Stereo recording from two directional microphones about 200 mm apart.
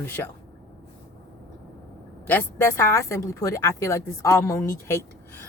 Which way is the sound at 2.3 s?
10° left (ahead or behind).